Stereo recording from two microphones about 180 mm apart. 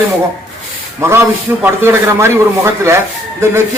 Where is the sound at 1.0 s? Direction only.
15° right (ahead or behind).